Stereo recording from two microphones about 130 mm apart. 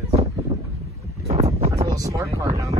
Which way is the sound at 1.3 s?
50° right (ahead or behind).